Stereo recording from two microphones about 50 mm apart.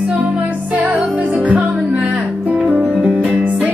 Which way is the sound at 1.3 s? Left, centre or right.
Right.